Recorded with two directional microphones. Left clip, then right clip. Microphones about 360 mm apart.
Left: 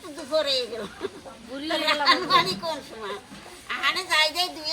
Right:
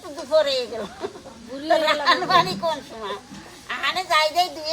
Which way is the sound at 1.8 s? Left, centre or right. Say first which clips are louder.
Right 2 dB; centre.